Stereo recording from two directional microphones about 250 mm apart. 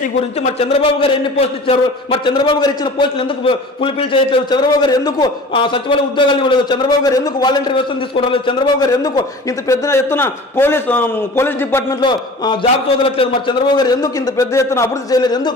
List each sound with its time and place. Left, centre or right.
0.4 s a man's voice: left